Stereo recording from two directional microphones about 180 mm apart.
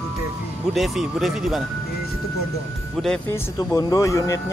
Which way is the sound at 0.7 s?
Centre (ahead or behind).